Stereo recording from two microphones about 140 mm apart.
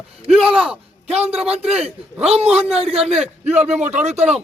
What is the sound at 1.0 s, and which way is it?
A man's voice, 45° right (ahead or behind).